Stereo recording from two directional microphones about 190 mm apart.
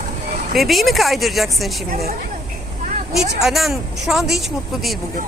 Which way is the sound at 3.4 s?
Centre (ahead or behind).